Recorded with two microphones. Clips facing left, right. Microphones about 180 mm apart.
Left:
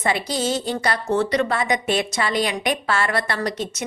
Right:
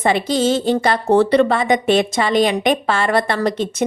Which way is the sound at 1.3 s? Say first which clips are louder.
Right 7 dB; 25° right (ahead or behind).